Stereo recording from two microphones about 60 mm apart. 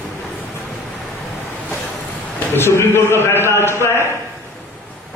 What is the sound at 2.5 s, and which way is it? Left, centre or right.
A man's voice, left.